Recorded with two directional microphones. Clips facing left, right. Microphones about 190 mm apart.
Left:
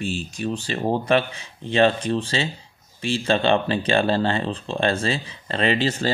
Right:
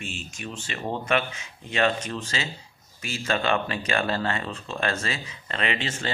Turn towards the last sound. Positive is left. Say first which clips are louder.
# left 8 dB
turn(degrees=35)  # may be behind; listen again after turning